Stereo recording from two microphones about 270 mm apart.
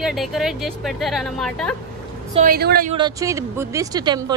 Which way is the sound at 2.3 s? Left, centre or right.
Right.